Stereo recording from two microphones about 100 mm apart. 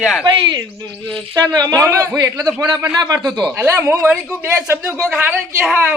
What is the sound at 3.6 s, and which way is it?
A man's voice, 25° right (ahead or behind).